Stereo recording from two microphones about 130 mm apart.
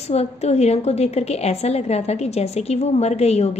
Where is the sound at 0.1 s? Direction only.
55° left (ahead or behind).